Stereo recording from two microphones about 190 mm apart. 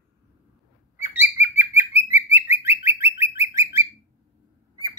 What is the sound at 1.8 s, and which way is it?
Bird, 10° right (ahead or behind).